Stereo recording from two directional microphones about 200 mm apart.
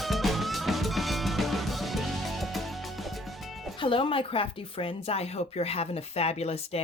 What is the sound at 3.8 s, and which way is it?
Speech, 25° left (ahead or behind).